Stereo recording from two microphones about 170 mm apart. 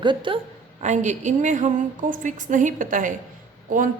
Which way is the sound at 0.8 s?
45° right (ahead or behind).